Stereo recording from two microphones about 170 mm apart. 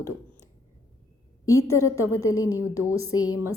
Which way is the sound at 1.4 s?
20° left (ahead or behind).